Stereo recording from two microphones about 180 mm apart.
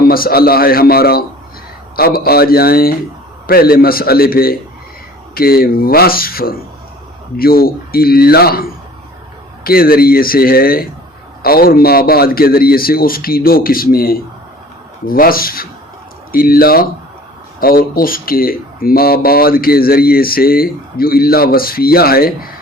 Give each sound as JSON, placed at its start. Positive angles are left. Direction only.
{"t": 0.1, "sound": "speech", "side_deg": 55}